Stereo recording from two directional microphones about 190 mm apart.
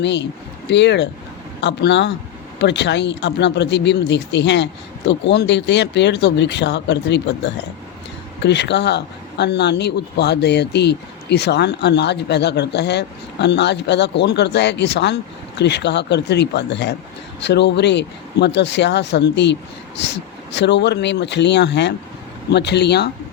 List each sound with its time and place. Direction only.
0.0 s speech: 65° left (ahead or behind)